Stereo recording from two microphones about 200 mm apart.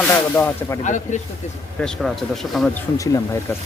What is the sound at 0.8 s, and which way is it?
Speech, 40° left (ahead or behind).